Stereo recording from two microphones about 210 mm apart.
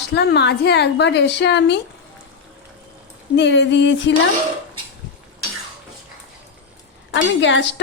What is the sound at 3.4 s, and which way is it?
Speech, 55° left (ahead or behind).